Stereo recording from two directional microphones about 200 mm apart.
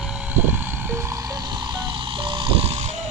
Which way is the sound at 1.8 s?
25° right (ahead or behind).